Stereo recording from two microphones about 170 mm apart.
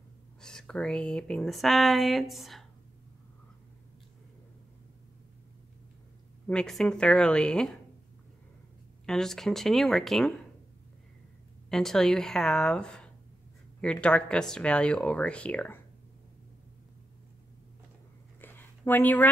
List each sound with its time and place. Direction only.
0.4 s speech: 5° left (ahead or behind)
6.4 s speech: 5° left (ahead or behind)
9.0 s speech: 5° left (ahead or behind)
11.7 s speech: 5° left (ahead or behind)
18.4 s a sound: 10° left (ahead or behind)